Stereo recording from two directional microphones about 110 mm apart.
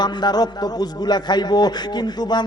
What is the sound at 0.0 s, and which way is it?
A man's voice, 40° left (ahead or behind).